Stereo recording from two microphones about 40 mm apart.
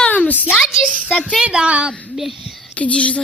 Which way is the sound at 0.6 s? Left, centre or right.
Centre.